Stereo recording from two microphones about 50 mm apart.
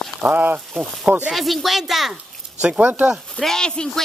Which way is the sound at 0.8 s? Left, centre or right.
Centre.